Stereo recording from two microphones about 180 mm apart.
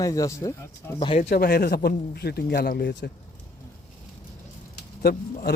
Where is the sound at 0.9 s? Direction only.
30° left (ahead or behind).